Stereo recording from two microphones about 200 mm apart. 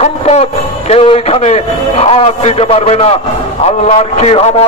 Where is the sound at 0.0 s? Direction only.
35° left (ahead or behind).